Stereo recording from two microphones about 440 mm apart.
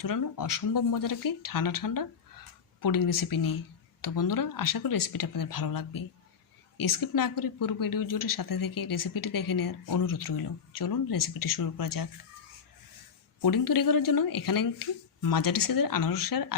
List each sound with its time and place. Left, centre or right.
0.0 s speech: left
13.4 s speech: left